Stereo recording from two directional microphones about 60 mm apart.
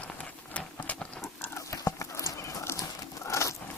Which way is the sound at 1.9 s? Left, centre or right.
Left.